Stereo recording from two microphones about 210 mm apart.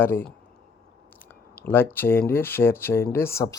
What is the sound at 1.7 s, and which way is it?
Speech, 10° left (ahead or behind).